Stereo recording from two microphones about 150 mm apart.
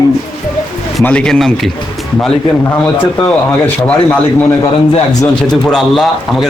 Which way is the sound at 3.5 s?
15° left (ahead or behind).